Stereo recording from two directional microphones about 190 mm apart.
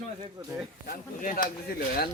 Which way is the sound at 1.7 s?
50° left (ahead or behind).